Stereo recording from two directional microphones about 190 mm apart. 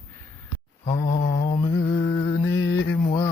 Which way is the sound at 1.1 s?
50° left (ahead or behind).